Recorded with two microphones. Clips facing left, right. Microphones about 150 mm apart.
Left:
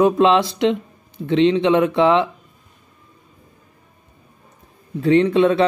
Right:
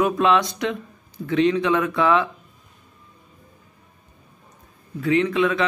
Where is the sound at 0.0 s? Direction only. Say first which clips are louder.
Left 5 dB; 30° left (ahead or behind).